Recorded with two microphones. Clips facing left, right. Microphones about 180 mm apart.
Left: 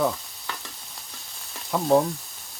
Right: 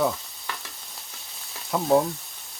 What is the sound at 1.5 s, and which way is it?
Frying, centre (ahead or behind).